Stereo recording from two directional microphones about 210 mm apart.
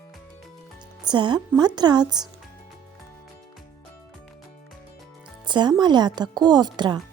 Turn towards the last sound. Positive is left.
turn(degrees=-20)  # may be behind; listen again after turning